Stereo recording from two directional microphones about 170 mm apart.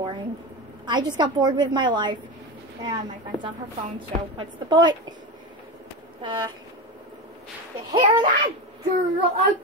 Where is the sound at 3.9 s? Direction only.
25° right (ahead or behind).